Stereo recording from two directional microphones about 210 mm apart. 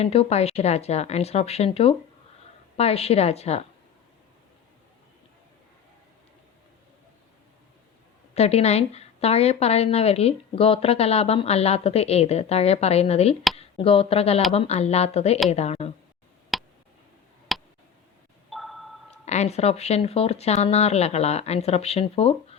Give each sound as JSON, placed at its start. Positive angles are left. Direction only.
{"t": 0.0, "sound": "a woman's voice", "side_deg": 30}
{"t": 8.4, "sound": "a woman's voice", "side_deg": 30}
{"t": 16.5, "sound": "tick", "side_deg": 0}
{"t": 17.5, "sound": "a sound", "side_deg": 0}
{"t": 18.5, "sound": "sonar", "side_deg": 0}
{"t": 19.2, "sound": "a woman's voice", "side_deg": 30}